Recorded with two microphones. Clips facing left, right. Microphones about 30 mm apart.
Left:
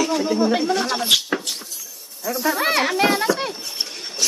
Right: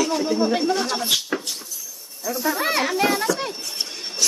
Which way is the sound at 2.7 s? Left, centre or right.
Left.